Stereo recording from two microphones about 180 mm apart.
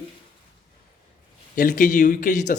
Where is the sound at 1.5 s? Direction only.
50° left (ahead or behind).